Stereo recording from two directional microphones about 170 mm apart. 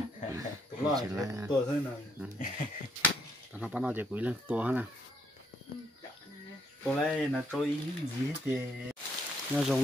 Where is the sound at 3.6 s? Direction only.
5° right (ahead or behind).